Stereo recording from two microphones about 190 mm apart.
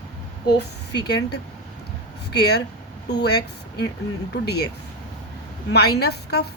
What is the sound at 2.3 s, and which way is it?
A woman's voice, 60° left (ahead or behind).